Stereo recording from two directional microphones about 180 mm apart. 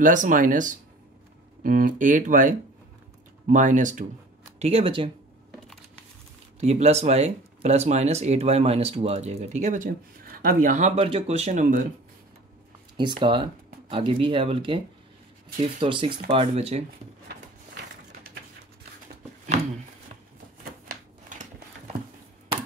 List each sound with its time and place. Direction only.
0.0 s speech: 45° right (ahead or behind)
4.6 s speech: 35° right (ahead or behind)
6.6 s speech: 35° right (ahead or behind)
12.9 s speech: 25° right (ahead or behind)
15.8 s speech: 30° right (ahead or behind)
20.9 s shuffling cards: 45° right (ahead or behind)